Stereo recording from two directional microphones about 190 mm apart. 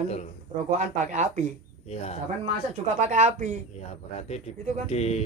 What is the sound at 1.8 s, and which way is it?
Speech, 35° left (ahead or behind).